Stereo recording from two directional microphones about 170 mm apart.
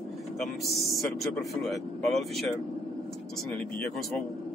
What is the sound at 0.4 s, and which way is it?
A man's voice, centre (ahead or behind).